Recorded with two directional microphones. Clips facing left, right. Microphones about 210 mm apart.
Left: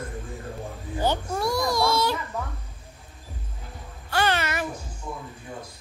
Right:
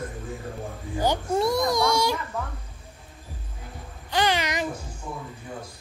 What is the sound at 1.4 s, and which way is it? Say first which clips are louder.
Baby cry: right 2 dB; 20° right (ahead or behind).